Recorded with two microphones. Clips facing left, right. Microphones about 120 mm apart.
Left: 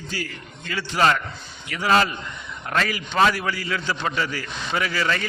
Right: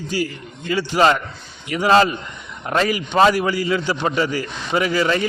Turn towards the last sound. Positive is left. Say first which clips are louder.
# right 6 dB
turn(degrees=-20)  # may be behind; listen again after turning